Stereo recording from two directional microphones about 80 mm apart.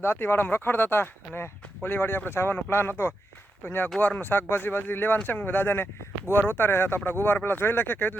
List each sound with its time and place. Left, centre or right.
0.0 s speech: left